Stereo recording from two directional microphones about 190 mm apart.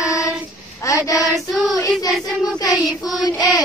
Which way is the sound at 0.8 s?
15° left (ahead or behind).